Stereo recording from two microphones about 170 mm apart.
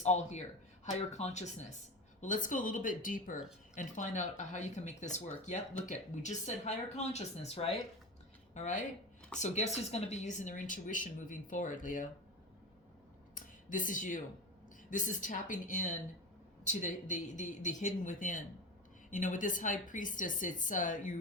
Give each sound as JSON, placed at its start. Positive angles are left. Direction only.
{"t": 0.0, "sound": "speech", "side_deg": 45}
{"t": 8.5, "sound": "speech", "side_deg": 45}
{"t": 13.3, "sound": "a sound", "side_deg": 50}
{"t": 14.8, "sound": "speech", "side_deg": 50}